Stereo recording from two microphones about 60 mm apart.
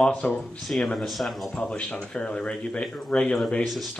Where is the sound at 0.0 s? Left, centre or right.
Centre.